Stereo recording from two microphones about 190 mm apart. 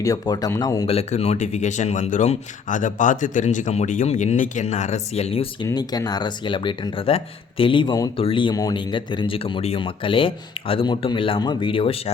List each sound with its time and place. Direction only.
0.0 s speech: 20° left (ahead or behind)
0.9 s speech: 35° left (ahead or behind)